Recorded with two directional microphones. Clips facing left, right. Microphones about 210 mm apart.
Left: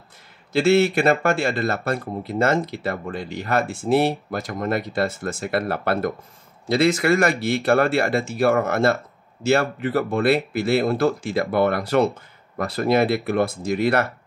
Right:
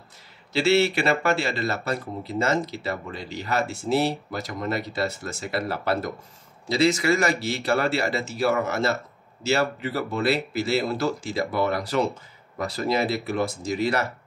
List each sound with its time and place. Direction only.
0.5 s speech: 50° left (ahead or behind)